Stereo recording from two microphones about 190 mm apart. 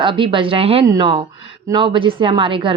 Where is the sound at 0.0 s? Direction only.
25° right (ahead or behind).